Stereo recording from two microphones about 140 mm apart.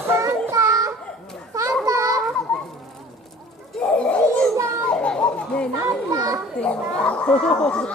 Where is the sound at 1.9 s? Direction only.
25° right (ahead or behind).